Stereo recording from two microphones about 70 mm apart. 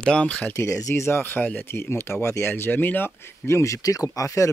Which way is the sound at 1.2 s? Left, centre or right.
Left.